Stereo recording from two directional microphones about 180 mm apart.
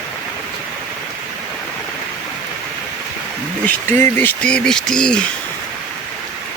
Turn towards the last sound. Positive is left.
turn(degrees=5)  # may be behind; listen again after turning